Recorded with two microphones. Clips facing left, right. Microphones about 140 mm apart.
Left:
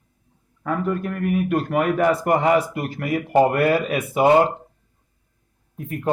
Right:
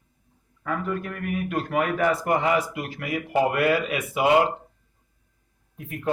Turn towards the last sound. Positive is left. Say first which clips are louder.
# left 4 dB
turn(degrees=45)  # may be behind; listen again after turning